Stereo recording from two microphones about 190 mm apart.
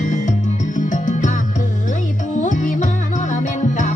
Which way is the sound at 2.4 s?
40° left (ahead or behind).